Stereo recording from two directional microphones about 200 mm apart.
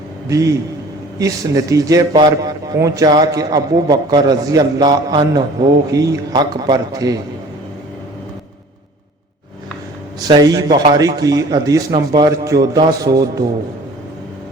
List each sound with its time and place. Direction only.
1.2 s a man's voice: 15° right (ahead or behind)
10.2 s speech: 20° right (ahead or behind)